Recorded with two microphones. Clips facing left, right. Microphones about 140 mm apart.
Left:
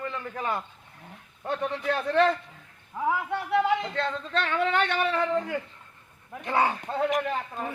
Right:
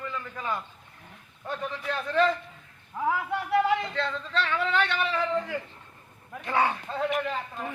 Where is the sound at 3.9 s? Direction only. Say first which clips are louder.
Left 1 dB; 45° left (ahead or behind).